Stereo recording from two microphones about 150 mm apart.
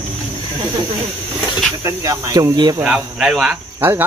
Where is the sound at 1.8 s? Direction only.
20° right (ahead or behind).